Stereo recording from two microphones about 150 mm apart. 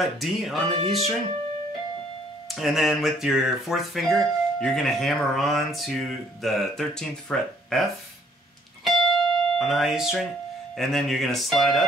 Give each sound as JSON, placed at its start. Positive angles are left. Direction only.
{"t": 0.0, "sound": "speech", "side_deg": 0}
{"t": 0.7, "sound": "speech", "side_deg": -35}
{"t": 2.4, "sound": "speech", "side_deg": 0}
{"t": 8.8, "sound": "music", "side_deg": 0}
{"t": 10.8, "sound": "speech", "side_deg": 5}